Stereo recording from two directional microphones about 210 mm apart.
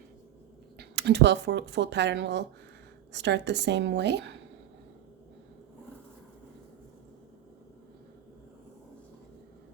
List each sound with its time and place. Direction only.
0.8 s speech: 55° right (ahead or behind)